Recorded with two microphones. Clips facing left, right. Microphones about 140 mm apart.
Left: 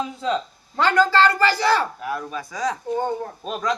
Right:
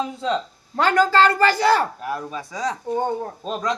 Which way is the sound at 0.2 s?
Centre (ahead or behind).